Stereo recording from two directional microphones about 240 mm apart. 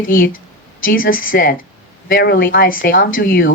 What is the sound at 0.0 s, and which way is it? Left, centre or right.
Speech, left.